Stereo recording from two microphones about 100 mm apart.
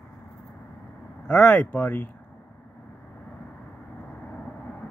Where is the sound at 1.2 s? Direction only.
10° left (ahead or behind).